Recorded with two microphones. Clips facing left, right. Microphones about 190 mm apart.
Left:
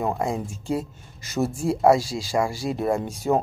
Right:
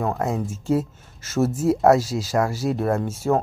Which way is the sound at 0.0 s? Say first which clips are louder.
Right 1 dB; 10° left (ahead or behind).